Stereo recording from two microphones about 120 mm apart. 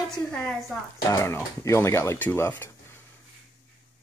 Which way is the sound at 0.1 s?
5° left (ahead or behind).